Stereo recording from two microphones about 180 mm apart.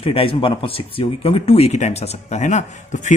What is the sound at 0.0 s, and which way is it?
Speech, 30° left (ahead or behind).